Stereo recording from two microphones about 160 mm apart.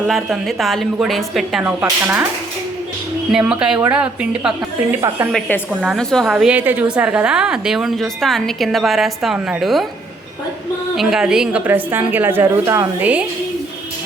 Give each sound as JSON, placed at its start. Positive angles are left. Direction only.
{"t": 0.1, "sound": "a woman's voice", "side_deg": 0}
{"t": 3.3, "sound": "a woman's voice", "side_deg": -5}
{"t": 4.9, "sound": "a woman's voice", "side_deg": -15}
{"t": 5.8, "sound": "a woman's voice", "side_deg": 0}
{"t": 10.9, "sound": "a woman's voice", "side_deg": -5}